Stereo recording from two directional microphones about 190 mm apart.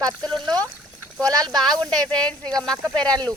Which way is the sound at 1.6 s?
Centre (ahead or behind).